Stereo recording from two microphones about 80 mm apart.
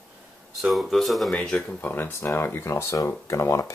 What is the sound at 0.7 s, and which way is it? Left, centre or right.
Speech, centre.